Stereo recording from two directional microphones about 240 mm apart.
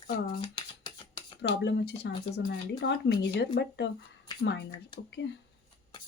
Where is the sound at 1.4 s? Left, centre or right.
Left.